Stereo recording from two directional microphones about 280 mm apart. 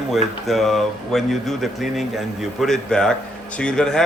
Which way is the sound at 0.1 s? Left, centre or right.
Centre.